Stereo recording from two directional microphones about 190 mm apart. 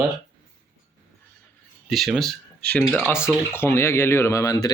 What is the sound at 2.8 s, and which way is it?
Speech, 5° right (ahead or behind).